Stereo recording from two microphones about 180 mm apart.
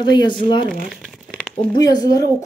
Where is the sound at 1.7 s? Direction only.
20° left (ahead or behind).